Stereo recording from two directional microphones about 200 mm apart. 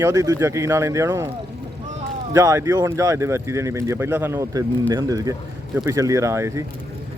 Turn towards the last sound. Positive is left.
turn(degrees=-15)  # may be behind; listen again after turning